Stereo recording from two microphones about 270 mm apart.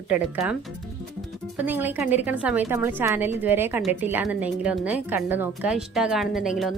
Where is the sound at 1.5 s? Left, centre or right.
Centre.